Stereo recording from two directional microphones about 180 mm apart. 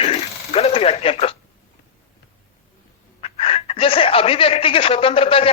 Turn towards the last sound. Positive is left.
turn(degrees=30)  # may be behind; listen again after turning